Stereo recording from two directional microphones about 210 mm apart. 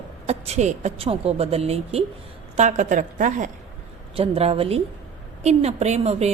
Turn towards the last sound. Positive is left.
turn(degrees=-30)  # may be behind; listen again after turning